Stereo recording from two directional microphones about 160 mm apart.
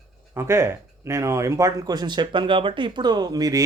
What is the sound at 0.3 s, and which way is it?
Speech, 15° right (ahead or behind).